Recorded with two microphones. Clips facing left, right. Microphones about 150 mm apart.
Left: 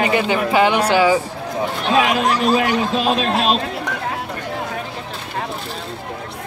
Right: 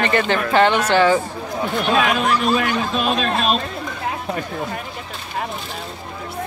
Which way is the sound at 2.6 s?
30° left (ahead or behind).